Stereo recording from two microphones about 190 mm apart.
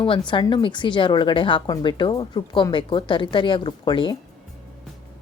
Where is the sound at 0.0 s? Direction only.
25° left (ahead or behind).